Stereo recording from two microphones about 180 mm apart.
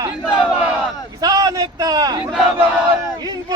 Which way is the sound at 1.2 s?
20° right (ahead or behind).